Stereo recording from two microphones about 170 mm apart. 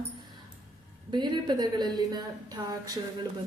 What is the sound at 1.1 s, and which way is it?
A woman's voice, 25° right (ahead or behind).